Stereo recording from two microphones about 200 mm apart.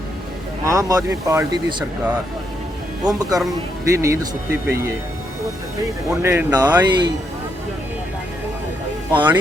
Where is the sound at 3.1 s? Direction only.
20° right (ahead or behind).